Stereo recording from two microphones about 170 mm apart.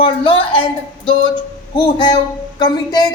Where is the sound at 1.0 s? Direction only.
25° left (ahead or behind).